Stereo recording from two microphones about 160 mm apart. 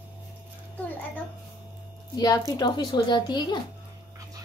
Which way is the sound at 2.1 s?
25° left (ahead or behind).